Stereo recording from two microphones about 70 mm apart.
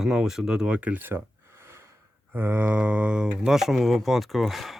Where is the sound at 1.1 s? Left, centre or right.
Right.